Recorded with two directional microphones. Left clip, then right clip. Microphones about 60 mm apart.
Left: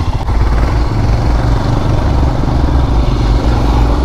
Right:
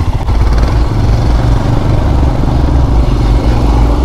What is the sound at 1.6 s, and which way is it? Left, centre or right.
Vehicle, centre.